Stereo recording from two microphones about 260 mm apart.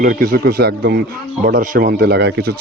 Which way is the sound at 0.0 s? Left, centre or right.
Right.